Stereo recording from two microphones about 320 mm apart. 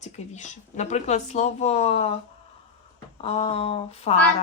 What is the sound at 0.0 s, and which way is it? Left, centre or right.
Speech, left.